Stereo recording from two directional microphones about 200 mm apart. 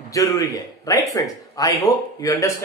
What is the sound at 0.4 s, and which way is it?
A man's voice, 15° left (ahead or behind).